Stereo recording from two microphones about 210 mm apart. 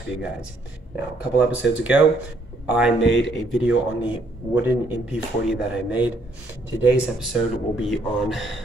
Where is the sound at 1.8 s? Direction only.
5° right (ahead or behind).